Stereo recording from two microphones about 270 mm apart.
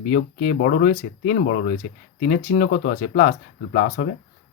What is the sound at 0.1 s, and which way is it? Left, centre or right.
Speech, left.